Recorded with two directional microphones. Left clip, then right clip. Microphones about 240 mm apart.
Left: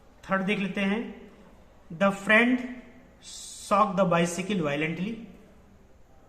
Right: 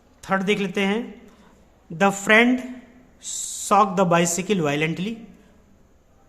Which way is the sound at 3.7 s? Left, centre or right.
Right.